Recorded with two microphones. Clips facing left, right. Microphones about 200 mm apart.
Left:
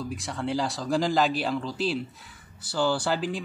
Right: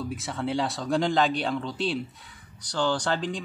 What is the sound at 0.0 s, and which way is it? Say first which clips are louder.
Speech: right 1 dB; centre (ahead or behind).